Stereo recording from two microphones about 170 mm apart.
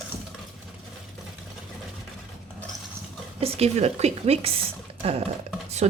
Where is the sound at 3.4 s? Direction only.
35° right (ahead or behind).